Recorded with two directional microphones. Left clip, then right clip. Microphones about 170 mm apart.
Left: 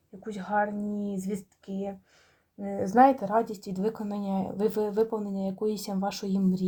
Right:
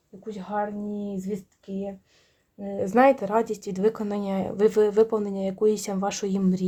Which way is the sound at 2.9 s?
35° right (ahead or behind).